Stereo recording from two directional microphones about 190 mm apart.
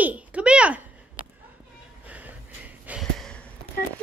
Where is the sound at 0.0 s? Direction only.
5° right (ahead or behind).